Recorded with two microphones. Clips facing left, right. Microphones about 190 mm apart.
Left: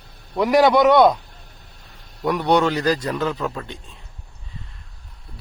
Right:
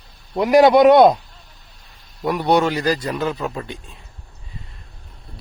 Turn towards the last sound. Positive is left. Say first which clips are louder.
# right 1 dB
turn(degrees=-10)  # may be behind; listen again after turning